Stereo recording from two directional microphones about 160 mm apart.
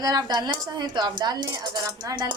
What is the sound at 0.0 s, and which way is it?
Speech, 25° right (ahead or behind).